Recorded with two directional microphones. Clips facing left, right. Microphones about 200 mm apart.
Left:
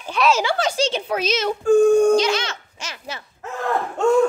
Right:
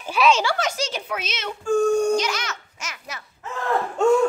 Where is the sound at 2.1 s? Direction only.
30° left (ahead or behind).